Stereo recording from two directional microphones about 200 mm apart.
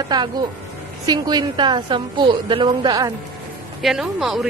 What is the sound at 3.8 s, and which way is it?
Speech, centre (ahead or behind).